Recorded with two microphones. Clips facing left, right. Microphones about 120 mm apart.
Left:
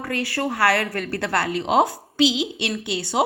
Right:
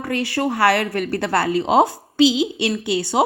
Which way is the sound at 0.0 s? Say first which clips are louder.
Right 4 dB; 25° right (ahead or behind).